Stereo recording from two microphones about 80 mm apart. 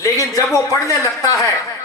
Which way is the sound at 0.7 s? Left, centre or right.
Left.